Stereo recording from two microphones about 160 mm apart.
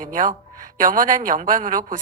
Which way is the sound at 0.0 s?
55° right (ahead or behind).